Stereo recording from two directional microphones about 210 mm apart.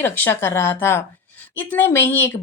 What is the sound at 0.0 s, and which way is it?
A woman's voice, 10° left (ahead or behind).